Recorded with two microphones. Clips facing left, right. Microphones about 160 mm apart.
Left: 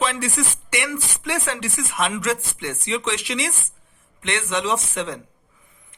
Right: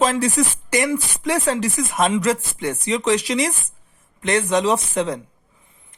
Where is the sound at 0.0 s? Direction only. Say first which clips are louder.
Right 6 dB; 40° right (ahead or behind).